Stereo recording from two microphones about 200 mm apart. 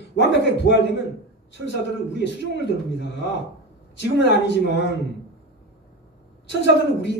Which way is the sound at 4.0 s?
60° left (ahead or behind).